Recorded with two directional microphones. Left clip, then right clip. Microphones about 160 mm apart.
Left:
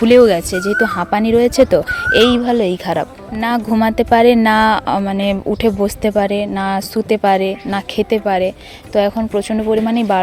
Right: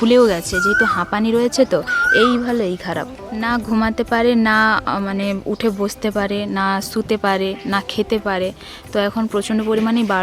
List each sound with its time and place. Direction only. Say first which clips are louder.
0.0 s a woman's voice: left 4 dB; 15° left (ahead or behind)